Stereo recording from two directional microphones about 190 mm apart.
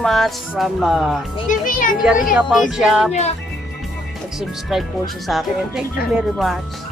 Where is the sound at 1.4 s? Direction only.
45° left (ahead or behind).